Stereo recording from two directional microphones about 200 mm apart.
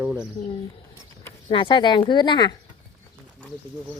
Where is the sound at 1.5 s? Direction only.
25° left (ahead or behind).